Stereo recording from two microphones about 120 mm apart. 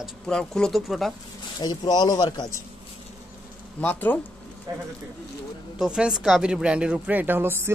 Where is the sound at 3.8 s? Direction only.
15° left (ahead or behind).